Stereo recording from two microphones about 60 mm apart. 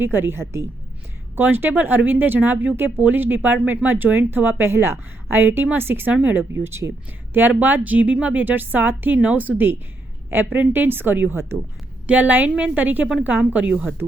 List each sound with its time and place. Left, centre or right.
0.0 s a woman's voice: right
1.4 s speech: right
6.6 s a woman's voice: right
7.6 s a woman's voice: right
12.0 s a woman's voice: right